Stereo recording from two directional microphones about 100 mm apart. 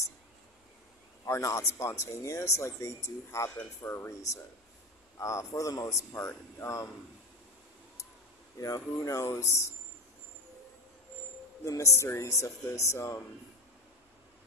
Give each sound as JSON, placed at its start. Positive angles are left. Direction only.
{"t": 1.2, "sound": "speech", "side_deg": 30}
{"t": 8.5, "sound": "speech", "side_deg": 35}
{"t": 11.6, "sound": "speech", "side_deg": 30}